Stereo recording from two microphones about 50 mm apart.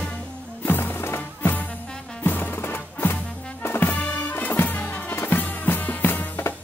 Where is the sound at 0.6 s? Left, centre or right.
Left.